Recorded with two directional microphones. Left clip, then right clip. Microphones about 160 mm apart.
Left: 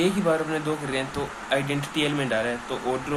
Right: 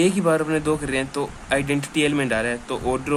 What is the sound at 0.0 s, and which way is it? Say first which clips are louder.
Speech: right 4 dB; 55° right (ahead or behind).